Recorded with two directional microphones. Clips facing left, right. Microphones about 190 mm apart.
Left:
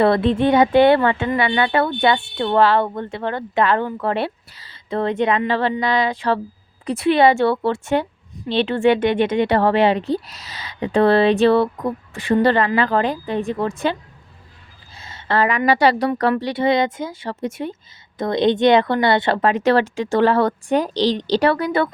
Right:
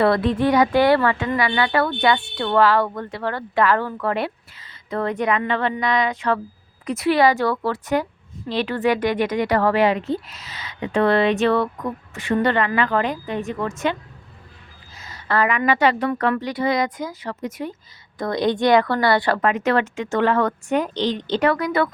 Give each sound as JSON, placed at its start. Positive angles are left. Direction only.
{"t": 0.0, "sound": "a woman's voice", "side_deg": 25}
{"t": 14.9, "sound": "a woman's voice", "side_deg": 25}